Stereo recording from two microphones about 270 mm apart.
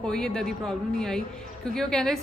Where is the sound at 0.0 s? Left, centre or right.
Centre.